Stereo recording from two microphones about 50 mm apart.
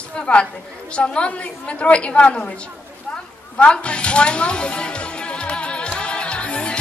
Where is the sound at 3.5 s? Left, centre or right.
Left.